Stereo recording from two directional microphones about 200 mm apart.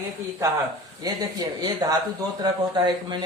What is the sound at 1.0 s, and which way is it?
Speech, 20° right (ahead or behind).